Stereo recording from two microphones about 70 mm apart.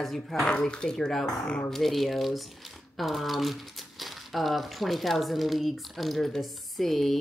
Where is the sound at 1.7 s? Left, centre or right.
Centre.